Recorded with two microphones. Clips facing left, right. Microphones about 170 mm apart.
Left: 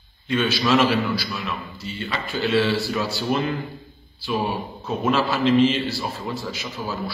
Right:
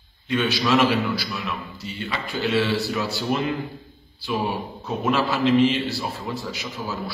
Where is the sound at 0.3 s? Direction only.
20° right (ahead or behind).